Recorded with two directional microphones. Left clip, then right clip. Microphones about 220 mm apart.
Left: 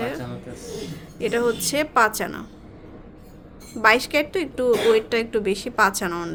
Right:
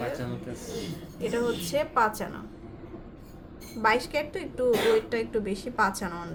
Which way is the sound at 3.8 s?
45° left (ahead or behind).